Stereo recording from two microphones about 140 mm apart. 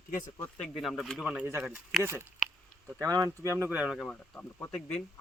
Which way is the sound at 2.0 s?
20° right (ahead or behind).